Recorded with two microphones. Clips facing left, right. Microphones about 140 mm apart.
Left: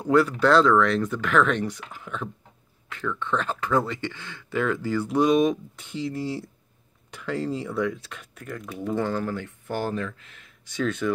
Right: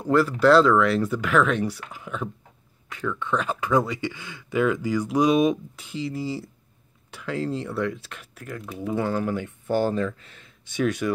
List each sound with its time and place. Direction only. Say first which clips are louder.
0.0 s speech: right 1 dB; centre (ahead or behind)
9.7 s speech: right 5 dB; 30° right (ahead or behind)
10.7 s speech: right 2 dB; 15° right (ahead or behind)